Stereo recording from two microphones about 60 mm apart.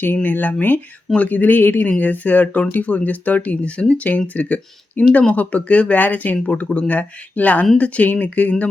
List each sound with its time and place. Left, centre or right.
0.0 s speech: left